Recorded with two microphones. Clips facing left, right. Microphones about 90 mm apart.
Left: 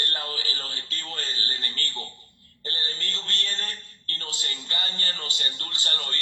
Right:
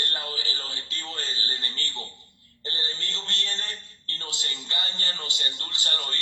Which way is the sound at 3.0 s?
30° right (ahead or behind).